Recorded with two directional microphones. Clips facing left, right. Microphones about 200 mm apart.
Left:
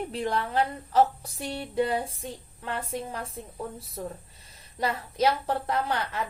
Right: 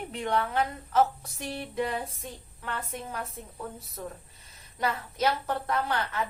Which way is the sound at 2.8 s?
30° left (ahead or behind).